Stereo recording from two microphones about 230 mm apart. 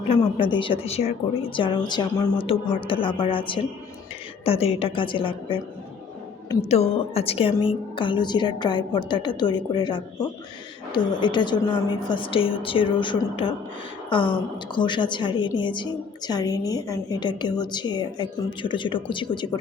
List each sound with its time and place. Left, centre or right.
0.1 s a woman's voice: left
6.7 s a woman's voice: left